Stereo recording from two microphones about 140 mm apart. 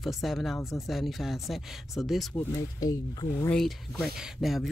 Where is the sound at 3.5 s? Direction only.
5° left (ahead or behind).